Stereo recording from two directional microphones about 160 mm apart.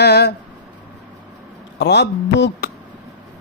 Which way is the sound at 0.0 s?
90° left.